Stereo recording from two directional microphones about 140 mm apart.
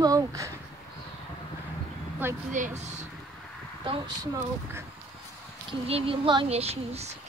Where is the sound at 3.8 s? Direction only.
40° right (ahead or behind).